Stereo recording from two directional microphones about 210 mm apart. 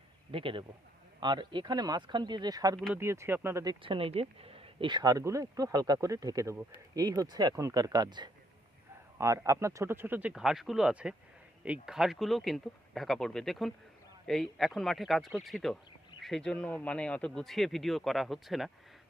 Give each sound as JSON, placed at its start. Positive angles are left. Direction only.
{"t": 0.3, "sound": "a man's voice", "side_deg": -25}